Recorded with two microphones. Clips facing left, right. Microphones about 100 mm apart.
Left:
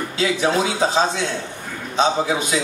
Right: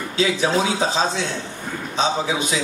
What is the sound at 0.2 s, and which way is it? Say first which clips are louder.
A man's voice: even; 50° left (ahead or behind).